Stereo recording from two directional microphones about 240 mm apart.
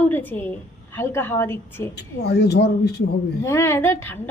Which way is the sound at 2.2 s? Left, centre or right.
Left.